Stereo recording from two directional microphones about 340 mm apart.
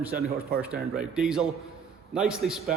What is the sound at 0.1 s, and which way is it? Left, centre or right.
Speech, right.